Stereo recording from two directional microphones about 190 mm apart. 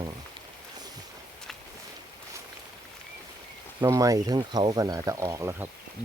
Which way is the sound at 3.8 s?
20° right (ahead or behind).